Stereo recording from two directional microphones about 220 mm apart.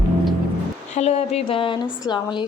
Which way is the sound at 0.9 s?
30° left (ahead or behind).